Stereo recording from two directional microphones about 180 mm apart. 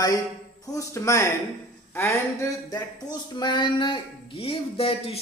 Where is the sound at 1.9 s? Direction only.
15° left (ahead or behind); by 5.2 s 30° left (ahead or behind).